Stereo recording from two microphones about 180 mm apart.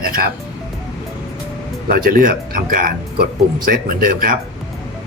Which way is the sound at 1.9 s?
55° right (ahead or behind).